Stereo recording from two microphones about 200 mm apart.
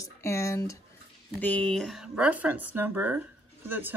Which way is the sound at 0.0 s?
15° left (ahead or behind).